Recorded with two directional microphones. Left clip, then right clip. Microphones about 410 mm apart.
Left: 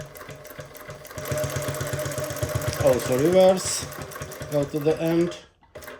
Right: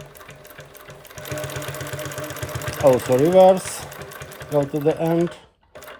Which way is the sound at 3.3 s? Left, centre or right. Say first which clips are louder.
Right 4 dB; centre.